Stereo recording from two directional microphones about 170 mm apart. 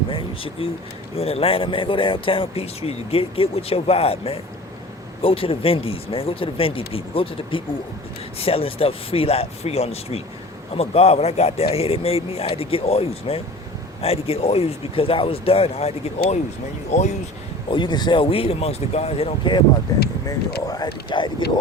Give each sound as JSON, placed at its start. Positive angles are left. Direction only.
{"t": 0.1, "sound": "a sound", "side_deg": 30}
{"t": 1.1, "sound": "speech", "side_deg": 35}
{"t": 17.7, "sound": "speech", "side_deg": 25}
{"t": 20.7, "sound": "speech", "side_deg": 25}